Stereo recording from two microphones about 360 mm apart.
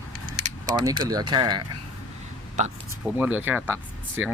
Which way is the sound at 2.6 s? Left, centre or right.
Centre.